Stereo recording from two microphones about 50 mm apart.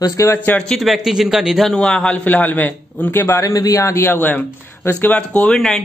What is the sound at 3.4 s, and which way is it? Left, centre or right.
Speech, left.